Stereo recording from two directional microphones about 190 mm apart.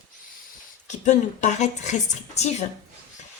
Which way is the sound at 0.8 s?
35° left (ahead or behind).